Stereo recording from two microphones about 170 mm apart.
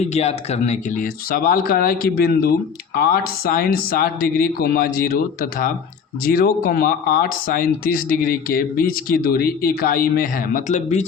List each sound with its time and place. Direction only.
0.0 s speech: 40° left (ahead or behind)